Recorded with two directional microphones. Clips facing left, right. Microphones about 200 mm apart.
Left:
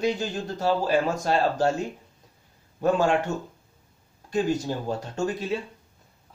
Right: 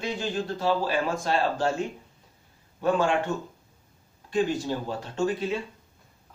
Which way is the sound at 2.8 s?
40° left (ahead or behind).